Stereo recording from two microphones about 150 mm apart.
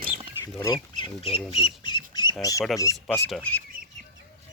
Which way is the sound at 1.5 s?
35° left (ahead or behind).